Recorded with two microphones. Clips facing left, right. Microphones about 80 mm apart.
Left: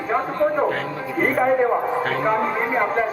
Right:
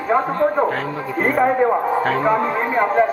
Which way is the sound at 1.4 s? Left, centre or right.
Centre.